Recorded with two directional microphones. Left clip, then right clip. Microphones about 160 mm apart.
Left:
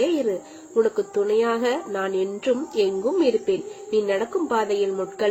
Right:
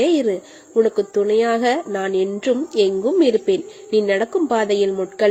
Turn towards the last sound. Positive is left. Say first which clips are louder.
# right 5 dB
turn(degrees=-45)  # may be behind; listen again after turning